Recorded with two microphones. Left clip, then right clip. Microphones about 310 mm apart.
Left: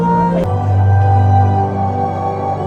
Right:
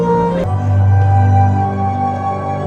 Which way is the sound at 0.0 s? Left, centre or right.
Centre.